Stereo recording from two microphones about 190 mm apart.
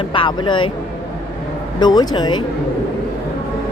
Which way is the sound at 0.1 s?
25° left (ahead or behind).